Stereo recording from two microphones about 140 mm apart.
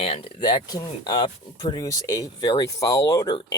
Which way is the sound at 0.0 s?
40° left (ahead or behind).